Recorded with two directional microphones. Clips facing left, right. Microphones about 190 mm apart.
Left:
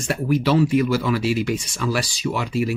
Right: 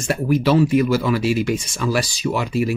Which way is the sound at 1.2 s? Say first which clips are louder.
Right 2 dB; 45° right (ahead or behind).